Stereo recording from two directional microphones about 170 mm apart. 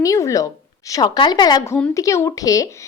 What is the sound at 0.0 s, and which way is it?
Speech, 20° left (ahead or behind).